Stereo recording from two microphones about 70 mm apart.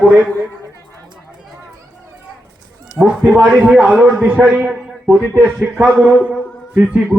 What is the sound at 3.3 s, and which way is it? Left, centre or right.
Speech, centre.